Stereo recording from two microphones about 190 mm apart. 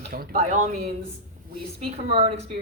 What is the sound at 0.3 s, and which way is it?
Speech, 40° right (ahead or behind).